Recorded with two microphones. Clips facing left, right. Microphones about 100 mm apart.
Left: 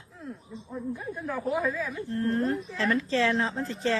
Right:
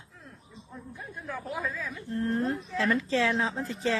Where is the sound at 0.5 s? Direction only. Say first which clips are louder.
Left 8 dB; 15° left (ahead or behind).